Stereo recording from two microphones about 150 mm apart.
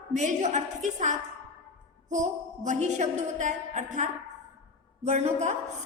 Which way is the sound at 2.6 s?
50° right (ahead or behind).